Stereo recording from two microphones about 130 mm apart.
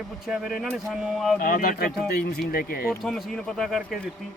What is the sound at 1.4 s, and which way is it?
Speech, 90° left.